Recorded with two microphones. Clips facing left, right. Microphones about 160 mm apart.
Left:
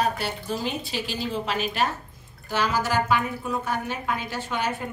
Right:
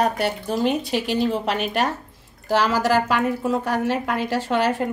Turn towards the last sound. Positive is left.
turn(degrees=-80)